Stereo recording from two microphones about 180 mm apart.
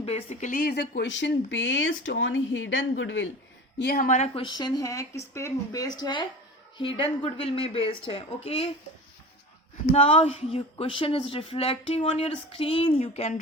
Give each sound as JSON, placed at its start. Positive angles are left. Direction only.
{"t": 0.0, "sound": "speech", "side_deg": 35}
{"t": 0.6, "sound": "speech", "side_deg": 65}
{"t": 3.8, "sound": "speech", "side_deg": 55}
{"t": 4.4, "sound": "speech", "side_deg": 25}
{"t": 9.9, "sound": "speech", "side_deg": 30}